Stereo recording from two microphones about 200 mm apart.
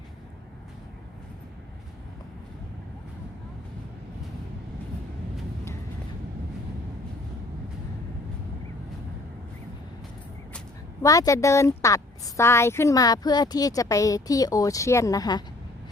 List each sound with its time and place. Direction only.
11.0 s a woman's voice: 15° left (ahead or behind)